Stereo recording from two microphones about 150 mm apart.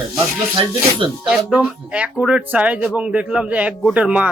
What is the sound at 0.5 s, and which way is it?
Speech, 35° right (ahead or behind).